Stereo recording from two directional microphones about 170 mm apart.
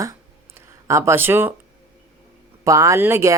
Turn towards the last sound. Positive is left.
turn(degrees=-15)  # may be behind; listen again after turning